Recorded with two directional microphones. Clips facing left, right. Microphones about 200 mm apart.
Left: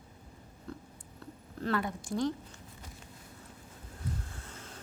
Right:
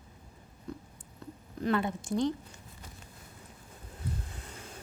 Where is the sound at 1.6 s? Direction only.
20° right (ahead or behind).